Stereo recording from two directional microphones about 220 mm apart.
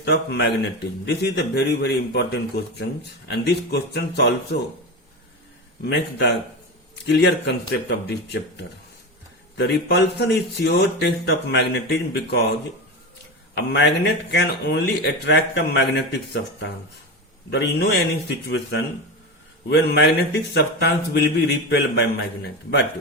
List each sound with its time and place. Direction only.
0.0 s speech: 45° left (ahead or behind)
5.8 s speech: 50° left (ahead or behind)
9.6 s speech: 50° left (ahead or behind)
13.6 s speech: 50° left (ahead or behind)